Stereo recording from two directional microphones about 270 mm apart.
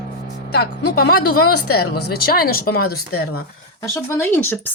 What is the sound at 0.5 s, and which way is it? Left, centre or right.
Speech, left.